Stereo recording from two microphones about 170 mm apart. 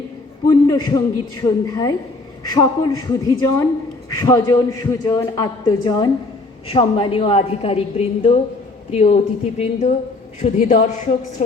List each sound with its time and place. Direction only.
0.4 s a man's voice: 20° left (ahead or behind); by 11.4 s 45° left (ahead or behind)